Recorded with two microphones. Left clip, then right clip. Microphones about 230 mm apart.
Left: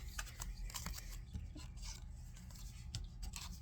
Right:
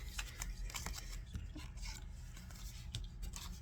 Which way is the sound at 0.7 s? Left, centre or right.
Centre.